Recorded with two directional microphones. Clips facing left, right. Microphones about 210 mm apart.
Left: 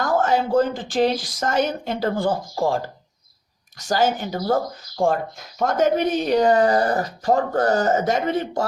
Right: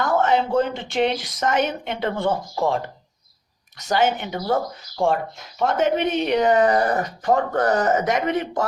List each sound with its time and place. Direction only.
0.0 s speech: 35° left (ahead or behind)